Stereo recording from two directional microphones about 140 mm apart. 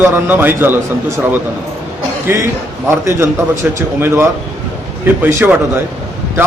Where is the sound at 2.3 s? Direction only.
15° right (ahead or behind).